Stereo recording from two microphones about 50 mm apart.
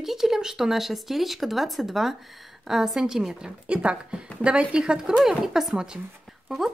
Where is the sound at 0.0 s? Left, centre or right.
Centre.